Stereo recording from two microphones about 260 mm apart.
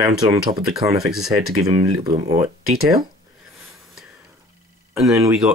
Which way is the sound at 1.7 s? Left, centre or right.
Centre.